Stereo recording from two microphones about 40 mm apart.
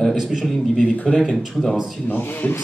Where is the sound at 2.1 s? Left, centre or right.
Left.